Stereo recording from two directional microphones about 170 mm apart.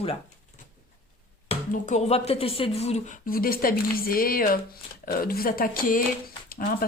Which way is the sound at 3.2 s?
60° left (ahead or behind).